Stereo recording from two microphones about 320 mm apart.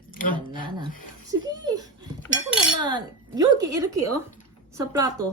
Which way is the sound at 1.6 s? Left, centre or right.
Centre.